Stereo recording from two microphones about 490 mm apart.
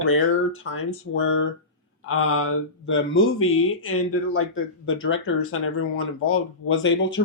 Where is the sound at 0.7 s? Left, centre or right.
Left.